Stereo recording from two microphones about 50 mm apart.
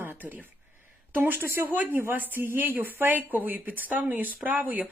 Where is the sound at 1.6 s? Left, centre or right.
Right.